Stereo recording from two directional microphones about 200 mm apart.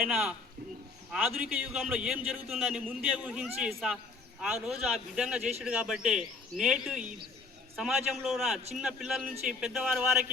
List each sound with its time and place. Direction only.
0.0 s a man's voice: 5° right (ahead or behind)